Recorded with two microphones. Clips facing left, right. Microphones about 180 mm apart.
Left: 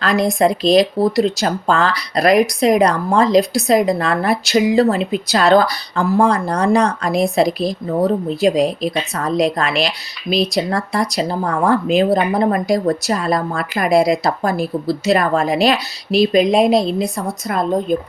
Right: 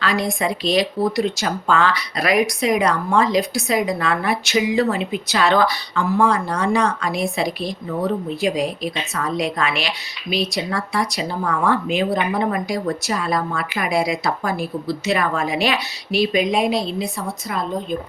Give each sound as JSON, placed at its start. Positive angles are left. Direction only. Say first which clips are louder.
{"t": 0.0, "sound": "a woman's voice", "louder": "left 6 dB", "side_deg": 40}